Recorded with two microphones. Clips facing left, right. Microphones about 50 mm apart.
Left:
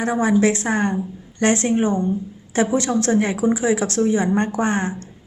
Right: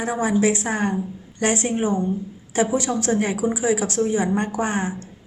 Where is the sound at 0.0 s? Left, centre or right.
Centre.